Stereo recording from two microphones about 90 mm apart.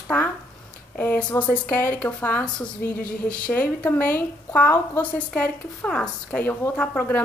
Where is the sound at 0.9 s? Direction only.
20° left (ahead or behind).